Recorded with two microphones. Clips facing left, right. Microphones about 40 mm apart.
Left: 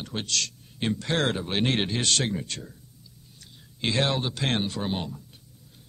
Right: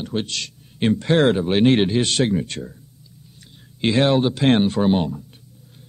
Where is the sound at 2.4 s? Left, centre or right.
Right.